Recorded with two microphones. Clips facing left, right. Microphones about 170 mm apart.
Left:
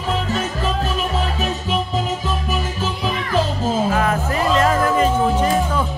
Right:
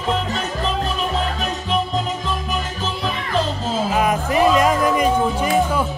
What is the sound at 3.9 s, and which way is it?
Music, 15° right (ahead or behind).